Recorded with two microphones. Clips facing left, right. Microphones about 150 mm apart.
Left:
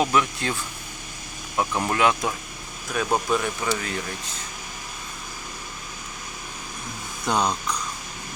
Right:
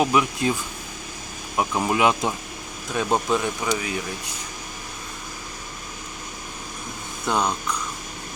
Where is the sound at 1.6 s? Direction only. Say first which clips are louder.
Right 1 dB; 15° right (ahead or behind).